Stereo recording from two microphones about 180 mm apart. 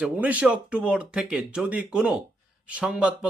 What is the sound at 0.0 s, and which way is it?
A man's voice, 5° right (ahead or behind).